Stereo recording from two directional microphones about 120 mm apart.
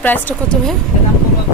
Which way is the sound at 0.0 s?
15° left (ahead or behind).